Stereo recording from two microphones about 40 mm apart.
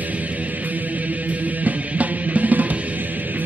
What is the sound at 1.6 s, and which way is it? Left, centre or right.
Music, right.